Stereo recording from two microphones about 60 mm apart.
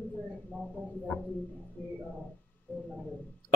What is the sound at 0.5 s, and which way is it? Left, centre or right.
Speech, left.